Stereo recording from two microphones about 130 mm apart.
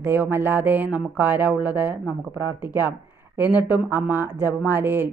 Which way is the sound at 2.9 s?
15° right (ahead or behind).